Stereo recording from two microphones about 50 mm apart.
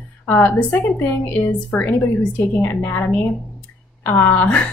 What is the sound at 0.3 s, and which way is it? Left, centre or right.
Speech, left.